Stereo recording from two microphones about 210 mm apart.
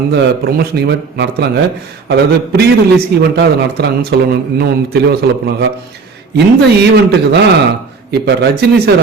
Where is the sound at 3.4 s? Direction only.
50° right (ahead or behind).